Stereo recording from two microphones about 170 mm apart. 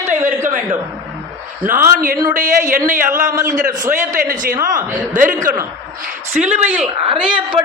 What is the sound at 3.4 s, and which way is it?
A man's voice, 50° right (ahead or behind).